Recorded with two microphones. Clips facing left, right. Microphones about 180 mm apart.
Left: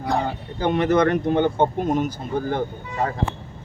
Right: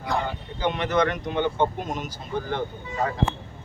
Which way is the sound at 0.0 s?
40° left (ahead or behind).